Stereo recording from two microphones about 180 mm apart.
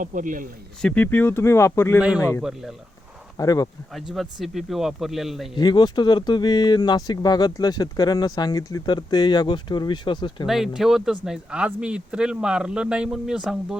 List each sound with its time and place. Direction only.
0.0 s speech: 45° right (ahead or behind)
0.8 s speech: 5° left (ahead or behind)
2.0 s a man's voice: 5° right (ahead or behind)
3.3 s speech: 20° left (ahead or behind)
3.9 s a man's voice: centre (ahead or behind)
5.5 s speech: 25° left (ahead or behind)
10.4 s a man's voice: centre (ahead or behind)